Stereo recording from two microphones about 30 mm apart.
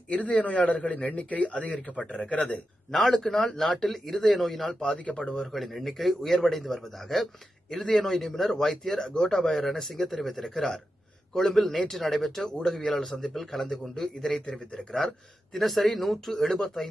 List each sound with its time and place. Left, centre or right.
0.1 s a man's voice: left
2.0 s a man's voice: left
2.9 s a man's voice: centre
4.9 s a man's voice: left
5.4 s a man's voice: centre
10.5 s a man's voice: left
11.3 s a man's voice: centre
14.7 s a man's voice: left
15.5 s a man's voice: centre